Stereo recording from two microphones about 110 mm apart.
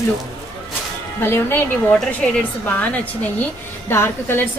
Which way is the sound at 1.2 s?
20° left (ahead or behind).